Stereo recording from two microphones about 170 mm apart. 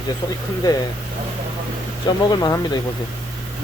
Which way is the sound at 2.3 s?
25° left (ahead or behind).